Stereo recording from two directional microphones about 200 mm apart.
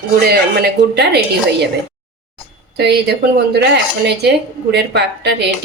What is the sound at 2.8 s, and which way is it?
Speech, 55° right (ahead or behind).